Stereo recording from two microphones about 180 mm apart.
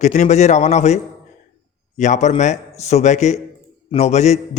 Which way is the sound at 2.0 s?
40° left (ahead or behind).